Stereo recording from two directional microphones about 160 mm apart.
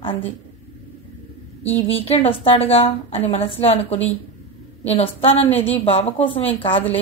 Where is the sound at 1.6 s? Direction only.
40° left (ahead or behind).